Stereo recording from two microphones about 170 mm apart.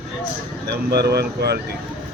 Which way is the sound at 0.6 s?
70° right (ahead or behind).